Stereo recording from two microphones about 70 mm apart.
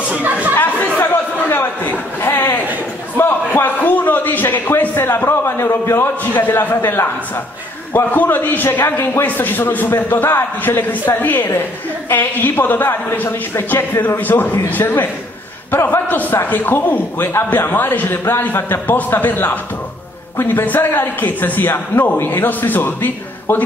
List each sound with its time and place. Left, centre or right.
0.1 s chatter: right
0.6 s chatter: left
3.2 s a man's voice: left